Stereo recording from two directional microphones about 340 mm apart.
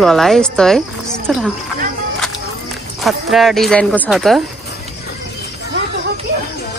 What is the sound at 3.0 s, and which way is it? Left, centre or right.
Speech, centre.